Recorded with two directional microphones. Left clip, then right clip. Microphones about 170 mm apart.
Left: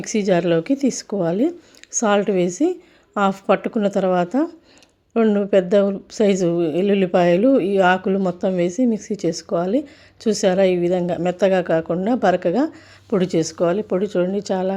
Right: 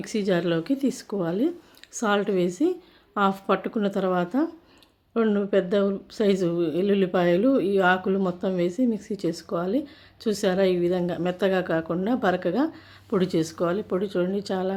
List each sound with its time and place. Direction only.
0.0 s speech: 35° left (ahead or behind)